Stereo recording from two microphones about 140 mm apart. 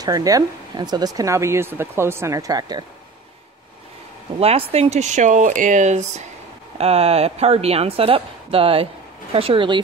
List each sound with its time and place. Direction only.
0.0 s speech: 25° right (ahead or behind)
4.4 s a woman's voice: 45° right (ahead or behind)